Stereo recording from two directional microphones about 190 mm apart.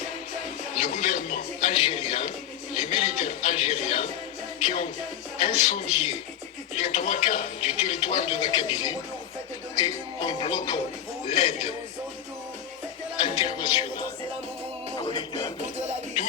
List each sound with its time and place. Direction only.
0.8 s a man's voice: 35° left (ahead or behind)
2.7 s a sound: 30° left (ahead or behind)
4.6 s speech: 30° left (ahead or behind)
9.7 s music: 20° left (ahead or behind)
11.3 s speech: 30° left (ahead or behind)
13.1 s music: 30° left (ahead or behind)